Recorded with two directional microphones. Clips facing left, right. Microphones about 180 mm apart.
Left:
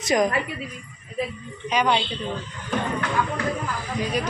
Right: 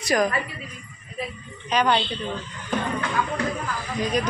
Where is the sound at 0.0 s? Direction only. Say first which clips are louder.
Left 1 dB; 20° left (ahead or behind).